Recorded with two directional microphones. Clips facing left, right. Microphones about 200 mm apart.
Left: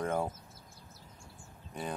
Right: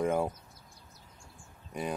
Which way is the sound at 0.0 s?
10° right (ahead or behind).